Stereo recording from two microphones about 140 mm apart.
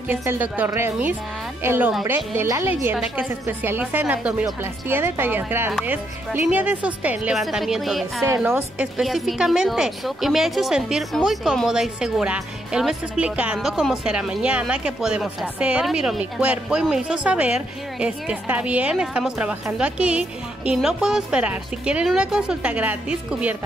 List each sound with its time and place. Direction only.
0.1 s a woman's voice: 15° right (ahead or behind)
8.5 s a woman's voice: 10° right (ahead or behind)